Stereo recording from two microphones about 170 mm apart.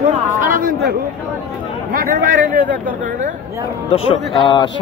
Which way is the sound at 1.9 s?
55° right (ahead or behind).